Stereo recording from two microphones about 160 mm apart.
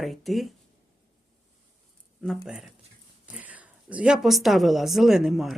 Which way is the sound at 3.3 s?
10° right (ahead or behind).